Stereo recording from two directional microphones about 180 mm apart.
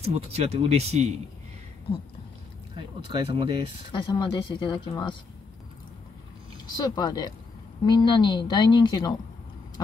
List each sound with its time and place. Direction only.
0.0 s speech: 35° right (ahead or behind)
3.0 s speech: 30° right (ahead or behind)
4.0 s a woman's voice: 25° left (ahead or behind)
6.8 s a woman's voice: 25° left (ahead or behind)